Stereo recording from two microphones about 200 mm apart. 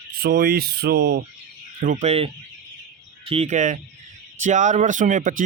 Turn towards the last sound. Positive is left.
turn(degrees=-40)  # may be behind; listen again after turning